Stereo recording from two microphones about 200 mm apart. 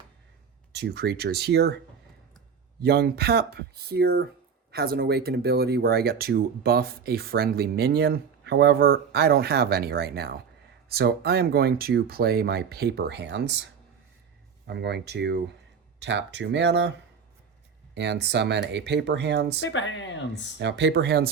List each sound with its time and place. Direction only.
0.8 s speech: 55° right (ahead or behind)
2.8 s speech: 50° right (ahead or behind)
14.7 s speech: 55° right (ahead or behind)
17.9 s speech: 60° right (ahead or behind)
19.6 s speech: 65° left (ahead or behind)
20.6 s speech: 60° right (ahead or behind)